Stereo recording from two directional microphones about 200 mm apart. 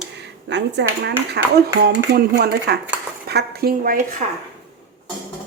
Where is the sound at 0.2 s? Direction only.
60° right (ahead or behind); by 4.4 s 40° right (ahead or behind).